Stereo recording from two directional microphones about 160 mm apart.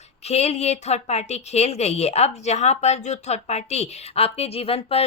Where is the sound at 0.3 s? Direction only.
40° left (ahead or behind).